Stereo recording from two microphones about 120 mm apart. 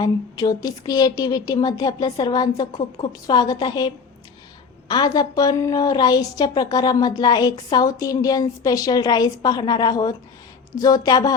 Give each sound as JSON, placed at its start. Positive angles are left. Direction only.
{"t": 0.0, "sound": "a woman's voice", "side_deg": 30}